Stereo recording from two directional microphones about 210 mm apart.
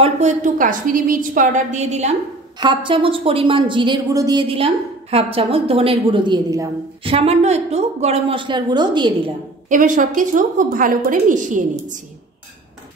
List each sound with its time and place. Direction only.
0.0 s a woman's voice: 35° right (ahead or behind)
9.7 s a woman's voice: 40° right (ahead or behind)